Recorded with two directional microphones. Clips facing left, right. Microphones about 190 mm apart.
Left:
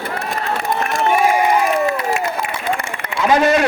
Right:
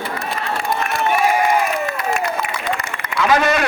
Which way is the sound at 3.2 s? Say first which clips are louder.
Left 2 dB; 30° left (ahead or behind).